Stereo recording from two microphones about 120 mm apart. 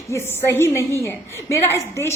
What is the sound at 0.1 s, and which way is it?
A woman's voice, 20° left (ahead or behind).